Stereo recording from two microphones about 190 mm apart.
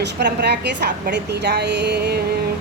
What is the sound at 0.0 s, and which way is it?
A woman's voice, 65° right (ahead or behind).